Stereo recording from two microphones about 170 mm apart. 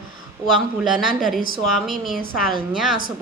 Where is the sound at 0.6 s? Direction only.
Centre (ahead or behind).